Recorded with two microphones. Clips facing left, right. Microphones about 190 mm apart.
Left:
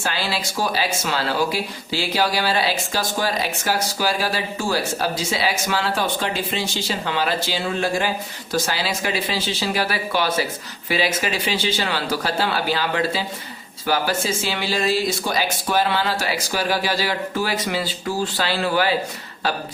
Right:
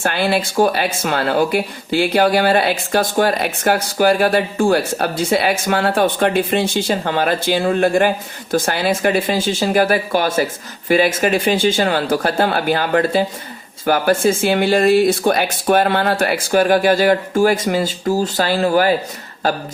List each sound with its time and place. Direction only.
0.0 s speech: 55° right (ahead or behind)